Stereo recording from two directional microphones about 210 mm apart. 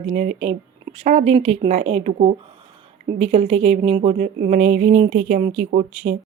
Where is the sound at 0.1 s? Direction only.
35° right (ahead or behind).